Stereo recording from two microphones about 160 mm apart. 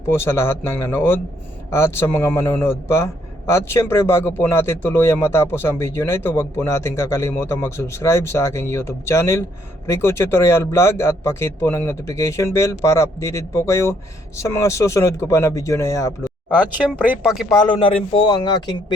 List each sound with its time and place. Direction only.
0.1 s a man's voice: 15° left (ahead or behind)
17.0 s speech: 10° right (ahead or behind)
17.5 s speech: 30° left (ahead or behind)